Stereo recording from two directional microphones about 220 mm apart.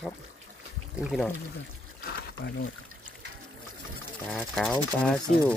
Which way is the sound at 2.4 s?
50° left (ahead or behind).